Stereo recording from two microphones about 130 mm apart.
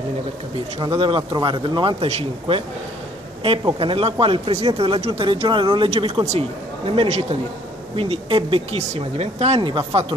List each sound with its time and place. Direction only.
0.7 s speech: 45° right (ahead or behind)
2.0 s speech: 50° right (ahead or behind)
9.6 s speech: 40° right (ahead or behind)